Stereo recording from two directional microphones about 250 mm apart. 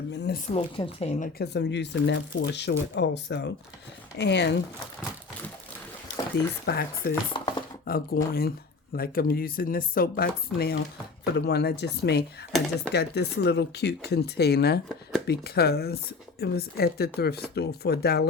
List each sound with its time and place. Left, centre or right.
0.1 s speech: left
0.5 s a woman's voice: left
1.4 s speech: left
6.7 s speech: left
7.3 s dishes: centre
7.9 s speech: left
12.5 s speech: centre
12.9 s speech: left